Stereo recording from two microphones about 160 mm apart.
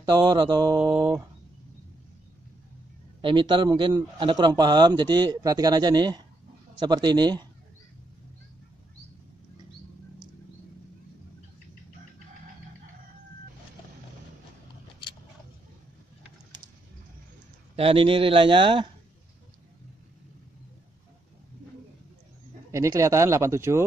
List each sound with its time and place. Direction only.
0.0 s a man's voice: 30° right (ahead or behind)
0.7 s mantra: 10° right (ahead or behind)
3.2 s a man's voice: 30° right (ahead or behind)
17.7 s speech: 35° right (ahead or behind)
22.7 s a man's voice: 20° right (ahead or behind)